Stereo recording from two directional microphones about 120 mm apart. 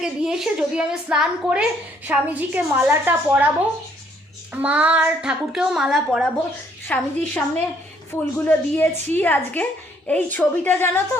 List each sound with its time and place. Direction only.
0.0 s a woman's voice: 5° right (ahead or behind)
4.5 s a woman's voice: 10° right (ahead or behind)
6.8 s a woman's voice: 10° left (ahead or behind)